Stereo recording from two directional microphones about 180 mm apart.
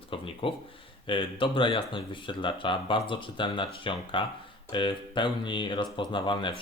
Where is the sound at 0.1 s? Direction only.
30° left (ahead or behind).